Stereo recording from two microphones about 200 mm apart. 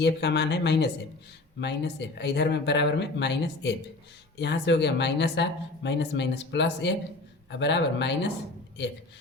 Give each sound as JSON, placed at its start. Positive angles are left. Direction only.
{"t": 0.0, "sound": "speech", "side_deg": 60}